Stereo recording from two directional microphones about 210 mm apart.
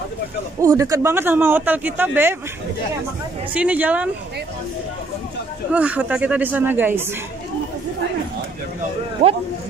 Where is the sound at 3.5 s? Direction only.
5° right (ahead or behind).